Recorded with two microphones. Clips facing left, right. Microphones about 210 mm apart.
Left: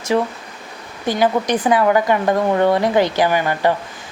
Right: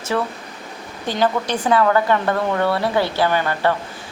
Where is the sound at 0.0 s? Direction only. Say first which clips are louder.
Left 4 dB; 15° left (ahead or behind).